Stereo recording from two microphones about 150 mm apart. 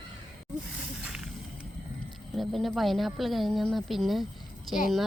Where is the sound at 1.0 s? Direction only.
5° right (ahead or behind).